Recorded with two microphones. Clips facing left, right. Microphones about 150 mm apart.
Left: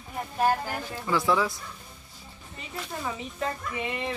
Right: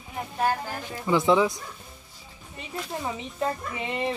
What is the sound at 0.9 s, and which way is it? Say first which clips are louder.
Speech: right 5 dB; 20° right (ahead or behind).